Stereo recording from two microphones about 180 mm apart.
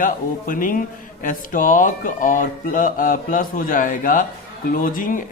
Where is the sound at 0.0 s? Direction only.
50° left (ahead or behind).